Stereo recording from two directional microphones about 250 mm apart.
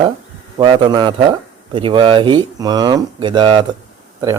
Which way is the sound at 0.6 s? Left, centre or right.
Centre.